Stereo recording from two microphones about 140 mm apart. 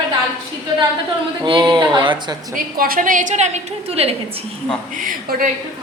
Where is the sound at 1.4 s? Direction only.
35° right (ahead or behind).